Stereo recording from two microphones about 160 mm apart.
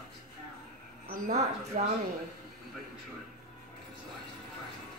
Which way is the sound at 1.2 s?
45° right (ahead or behind).